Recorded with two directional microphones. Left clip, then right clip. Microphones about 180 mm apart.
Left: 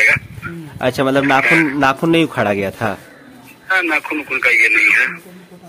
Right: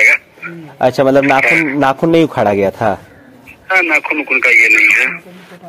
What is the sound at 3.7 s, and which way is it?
Speech, 20° right (ahead or behind).